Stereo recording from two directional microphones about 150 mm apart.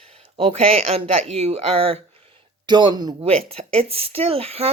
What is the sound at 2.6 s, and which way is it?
Speech, 30° right (ahead or behind).